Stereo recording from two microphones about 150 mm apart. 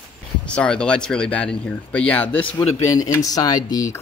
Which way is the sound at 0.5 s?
5° left (ahead or behind).